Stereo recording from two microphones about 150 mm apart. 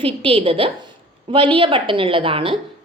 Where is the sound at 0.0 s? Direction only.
40° right (ahead or behind).